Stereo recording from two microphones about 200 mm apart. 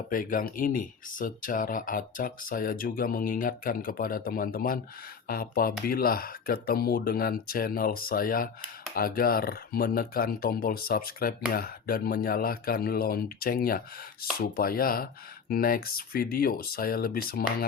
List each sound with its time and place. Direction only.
0.1 s speech: 45° left (ahead or behind)